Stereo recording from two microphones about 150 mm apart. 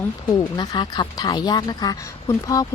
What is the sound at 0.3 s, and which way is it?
Speech, 25° left (ahead or behind).